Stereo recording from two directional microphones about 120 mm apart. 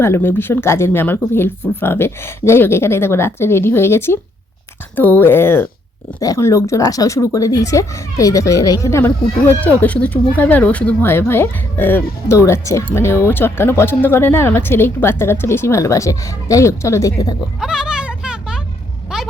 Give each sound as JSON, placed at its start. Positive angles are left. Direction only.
{"t": 0.0, "sound": "speech", "side_deg": 20}
{"t": 6.1, "sound": "speech", "side_deg": 30}
{"t": 17.6, "sound": "a sound", "side_deg": -5}